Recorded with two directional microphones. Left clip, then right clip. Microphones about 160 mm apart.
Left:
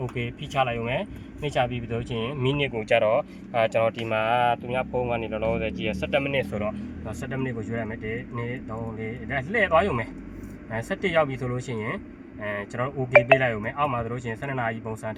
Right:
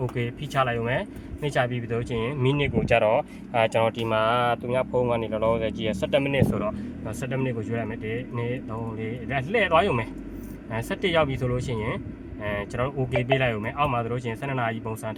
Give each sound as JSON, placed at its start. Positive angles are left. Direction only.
{"t": 0.2, "sound": "speech", "side_deg": 5}
{"t": 2.9, "sound": "speech", "side_deg": -5}